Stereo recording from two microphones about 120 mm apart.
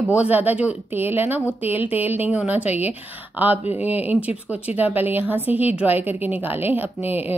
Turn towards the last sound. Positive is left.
turn(degrees=-15)  # may be behind; listen again after turning